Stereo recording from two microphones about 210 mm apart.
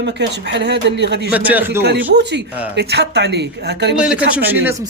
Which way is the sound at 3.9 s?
5° right (ahead or behind).